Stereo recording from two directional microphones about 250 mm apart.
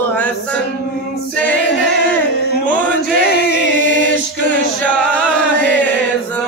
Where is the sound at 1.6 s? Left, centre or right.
Left.